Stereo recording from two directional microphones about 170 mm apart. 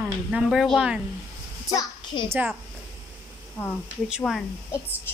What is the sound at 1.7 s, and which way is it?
Speech, 25° left (ahead or behind).